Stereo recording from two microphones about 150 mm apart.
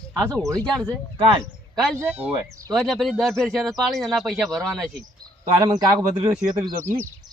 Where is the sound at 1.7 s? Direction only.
5° left (ahead or behind).